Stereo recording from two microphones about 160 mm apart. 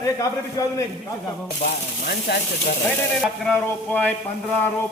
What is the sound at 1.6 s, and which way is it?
Speech, 85° left.